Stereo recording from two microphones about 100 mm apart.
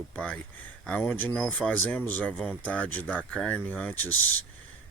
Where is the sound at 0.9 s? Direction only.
10° left (ahead or behind).